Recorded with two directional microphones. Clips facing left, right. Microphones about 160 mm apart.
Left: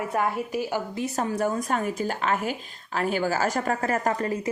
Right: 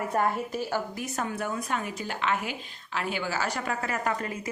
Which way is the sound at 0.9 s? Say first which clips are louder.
Left 5 dB; 30° left (ahead or behind).